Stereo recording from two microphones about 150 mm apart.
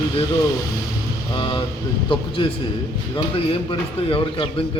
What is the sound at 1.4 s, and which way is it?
A man's voice, 35° left (ahead or behind).